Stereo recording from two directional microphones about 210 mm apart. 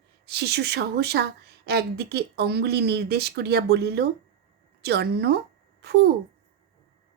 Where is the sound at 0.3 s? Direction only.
50° right (ahead or behind).